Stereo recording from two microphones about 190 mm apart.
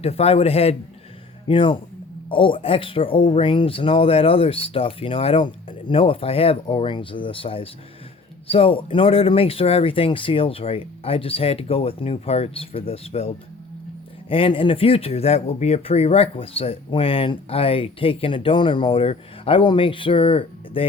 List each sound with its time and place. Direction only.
0.0 s a man's voice: 30° left (ahead or behind)